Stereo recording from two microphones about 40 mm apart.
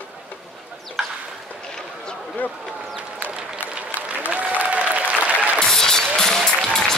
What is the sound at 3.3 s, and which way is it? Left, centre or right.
Applause, right.